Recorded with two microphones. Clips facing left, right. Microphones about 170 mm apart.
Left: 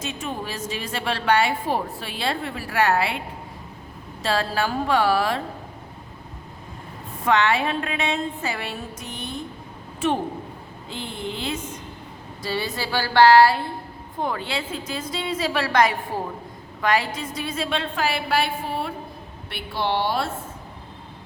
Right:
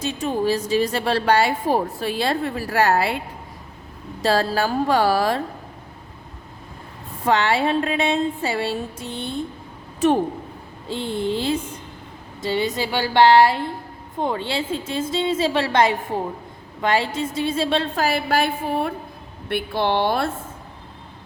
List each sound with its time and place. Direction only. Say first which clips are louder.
0.0 s a woman's voice: right 8 dB; 35° right (ahead or behind)
4.2 s a woman's voice: right 4 dB; 40° right (ahead or behind)
7.3 s a woman's voice: right 2 dB; 30° right (ahead or behind)
10.0 s a woman's voice: right 5 dB; 40° right (ahead or behind)
12.4 s a woman's voice: right 5 dB; 20° right (ahead or behind); by 20.3 s 55° right (ahead or behind)